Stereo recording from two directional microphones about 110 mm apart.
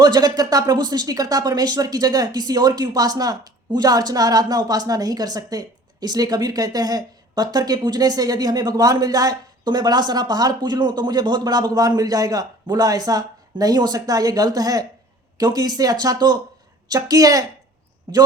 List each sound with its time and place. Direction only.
0.0 s speech: 35° right (ahead or behind)